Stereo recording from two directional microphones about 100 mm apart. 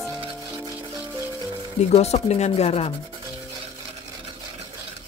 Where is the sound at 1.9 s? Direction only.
90° left.